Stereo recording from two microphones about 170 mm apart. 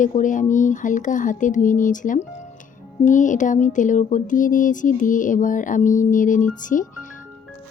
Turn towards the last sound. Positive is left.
turn(degrees=50)  # may be behind; listen again after turning